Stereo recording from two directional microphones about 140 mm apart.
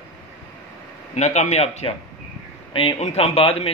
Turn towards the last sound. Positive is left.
turn(degrees=45)  # may be behind; listen again after turning